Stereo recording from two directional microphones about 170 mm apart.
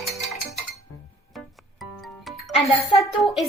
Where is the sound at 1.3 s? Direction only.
Centre (ahead or behind).